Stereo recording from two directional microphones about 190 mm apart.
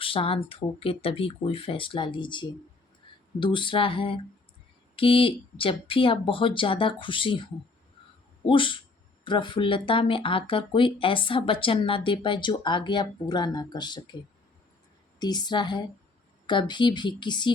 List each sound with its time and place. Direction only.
0.0 s speech: 30° left (ahead or behind)
8.4 s speech: 25° left (ahead or behind)
15.2 s speech: 20° left (ahead or behind)